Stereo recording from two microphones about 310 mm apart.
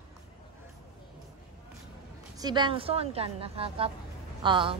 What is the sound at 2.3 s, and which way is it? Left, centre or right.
A woman's voice, centre.